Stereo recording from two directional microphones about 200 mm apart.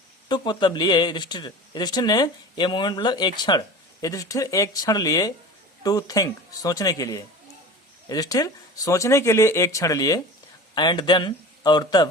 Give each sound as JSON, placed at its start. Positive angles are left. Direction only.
{"t": 0.3, "sound": "speech", "side_deg": 20}